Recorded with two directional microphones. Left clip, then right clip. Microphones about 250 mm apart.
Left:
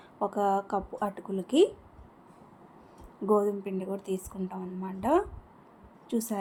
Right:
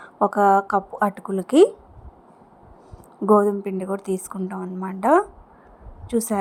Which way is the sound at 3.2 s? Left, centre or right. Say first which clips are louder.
Right 9 dB; right.